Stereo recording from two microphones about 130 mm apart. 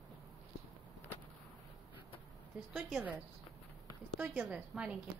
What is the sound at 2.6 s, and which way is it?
Speech, 5° right (ahead or behind).